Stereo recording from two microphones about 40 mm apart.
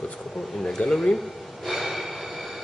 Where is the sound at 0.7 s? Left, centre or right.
Centre.